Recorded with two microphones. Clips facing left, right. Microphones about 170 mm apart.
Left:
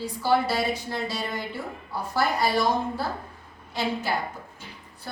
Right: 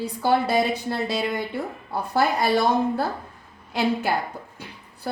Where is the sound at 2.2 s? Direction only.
60° right (ahead or behind).